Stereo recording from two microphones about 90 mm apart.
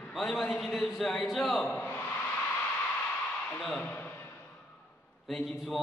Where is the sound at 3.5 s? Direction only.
5° left (ahead or behind).